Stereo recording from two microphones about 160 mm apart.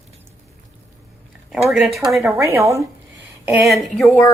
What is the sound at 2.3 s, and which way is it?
Speech, 15° right (ahead or behind).